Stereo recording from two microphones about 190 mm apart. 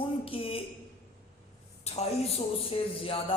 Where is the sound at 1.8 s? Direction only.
35° left (ahead or behind).